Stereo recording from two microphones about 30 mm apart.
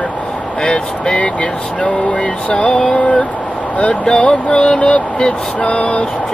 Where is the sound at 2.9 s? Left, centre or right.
Left.